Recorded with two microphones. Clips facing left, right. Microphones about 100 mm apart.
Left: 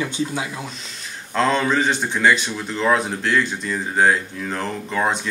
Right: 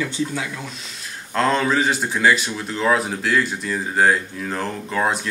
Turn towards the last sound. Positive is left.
turn(degrees=0)  # may be behind; listen again after turning